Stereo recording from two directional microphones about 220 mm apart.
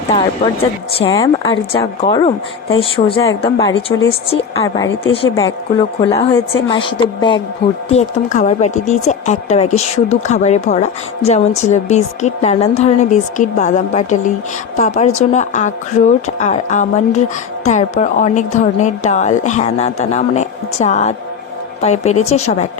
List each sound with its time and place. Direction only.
1.1 s a woman's voice: 15° left (ahead or behind)
7.9 s a woman's voice: 30° left (ahead or behind)